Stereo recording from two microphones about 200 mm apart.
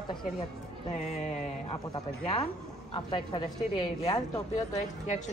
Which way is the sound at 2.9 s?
25° left (ahead or behind).